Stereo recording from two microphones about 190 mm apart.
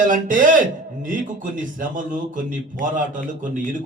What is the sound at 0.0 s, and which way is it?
A man's voice, 45° right (ahead or behind).